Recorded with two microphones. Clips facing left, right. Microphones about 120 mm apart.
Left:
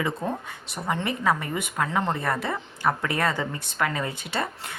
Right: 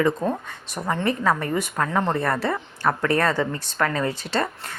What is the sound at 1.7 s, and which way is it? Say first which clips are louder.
A woman's voice: right 1 dB; 10° left (ahead or behind).